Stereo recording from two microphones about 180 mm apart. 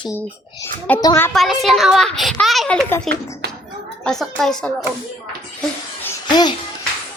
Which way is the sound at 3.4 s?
65° right (ahead or behind).